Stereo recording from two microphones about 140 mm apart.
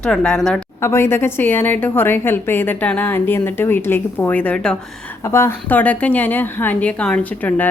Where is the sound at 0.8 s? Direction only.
20° left (ahead or behind).